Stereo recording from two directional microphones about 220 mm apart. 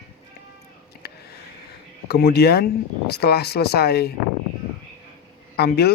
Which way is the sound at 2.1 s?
45° left (ahead or behind).